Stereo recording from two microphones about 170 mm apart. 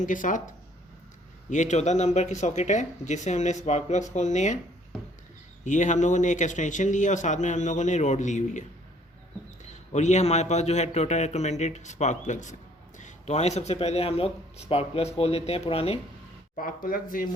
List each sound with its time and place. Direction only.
0.0 s speech: 50° left (ahead or behind)
5.6 s speech: 45° left (ahead or behind)
9.9 s speech: 45° left (ahead or behind)
16.6 s speech: 55° left (ahead or behind)